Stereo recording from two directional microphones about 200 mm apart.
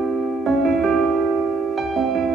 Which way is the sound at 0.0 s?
Centre (ahead or behind).